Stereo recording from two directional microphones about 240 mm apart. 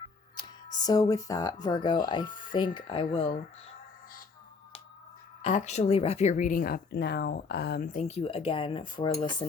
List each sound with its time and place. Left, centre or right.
0.4 s a sound: centre
0.8 s speech: centre
5.4 s speech: left